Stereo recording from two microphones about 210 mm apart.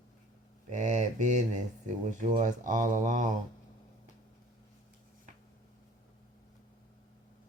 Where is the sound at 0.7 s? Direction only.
35° right (ahead or behind).